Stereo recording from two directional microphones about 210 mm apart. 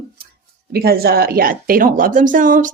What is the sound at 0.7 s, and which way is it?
A woman's voice, 45° right (ahead or behind).